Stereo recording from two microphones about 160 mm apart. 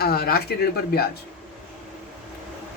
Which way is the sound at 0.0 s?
70° left (ahead or behind).